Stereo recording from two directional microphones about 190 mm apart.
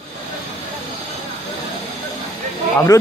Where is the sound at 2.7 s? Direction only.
10° left (ahead or behind).